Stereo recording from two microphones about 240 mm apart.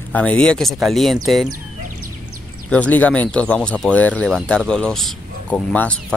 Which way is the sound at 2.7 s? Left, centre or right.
Centre.